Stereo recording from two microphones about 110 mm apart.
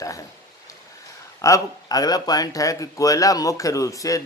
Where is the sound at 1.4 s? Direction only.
30° left (ahead or behind).